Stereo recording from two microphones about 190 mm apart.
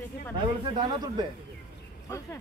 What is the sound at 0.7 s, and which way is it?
Speech, 20° right (ahead or behind).